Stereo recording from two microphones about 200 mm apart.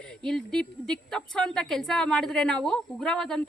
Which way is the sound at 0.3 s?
5° left (ahead or behind).